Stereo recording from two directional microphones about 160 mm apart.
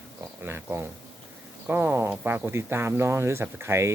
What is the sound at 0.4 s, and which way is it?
Speech, 15° right (ahead or behind).